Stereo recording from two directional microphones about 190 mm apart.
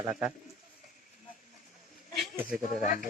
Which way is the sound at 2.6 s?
45° left (ahead or behind).